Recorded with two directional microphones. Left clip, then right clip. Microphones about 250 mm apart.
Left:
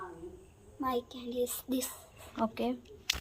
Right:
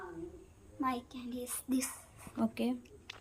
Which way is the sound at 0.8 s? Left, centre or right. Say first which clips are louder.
Left 2 dB; right.